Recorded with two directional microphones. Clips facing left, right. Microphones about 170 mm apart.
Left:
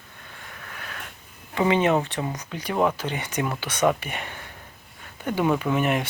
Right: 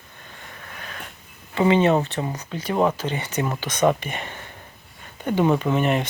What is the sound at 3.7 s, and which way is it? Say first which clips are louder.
Speech: right 2 dB; 15° right (ahead or behind).